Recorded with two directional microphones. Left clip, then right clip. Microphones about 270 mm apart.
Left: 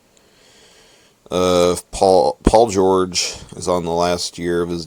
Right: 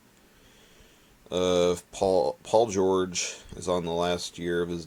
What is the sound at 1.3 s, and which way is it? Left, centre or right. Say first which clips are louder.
Speech: left 9 dB; left.